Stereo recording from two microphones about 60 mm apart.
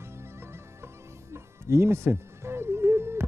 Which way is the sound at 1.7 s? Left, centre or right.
Right.